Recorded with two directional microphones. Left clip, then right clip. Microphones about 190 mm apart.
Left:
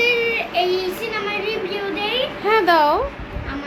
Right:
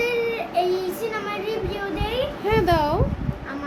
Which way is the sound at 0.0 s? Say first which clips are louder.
Left 5 dB; 15° right (ahead or behind).